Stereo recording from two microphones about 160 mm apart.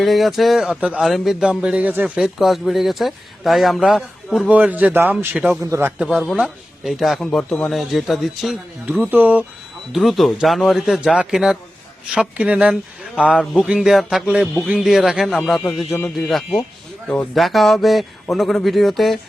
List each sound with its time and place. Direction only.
0.0 s speech: centre (ahead or behind)
5.6 s a man's voice: 20° right (ahead or behind)
6.0 s speech: 5° right (ahead or behind)
17.1 s speech: 5° left (ahead or behind)